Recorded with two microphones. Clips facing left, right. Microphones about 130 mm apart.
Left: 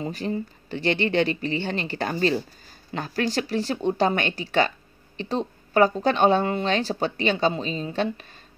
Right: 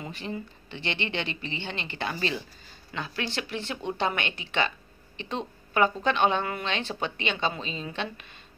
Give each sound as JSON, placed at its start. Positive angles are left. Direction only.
{"t": 0.0, "sound": "speech", "side_deg": 40}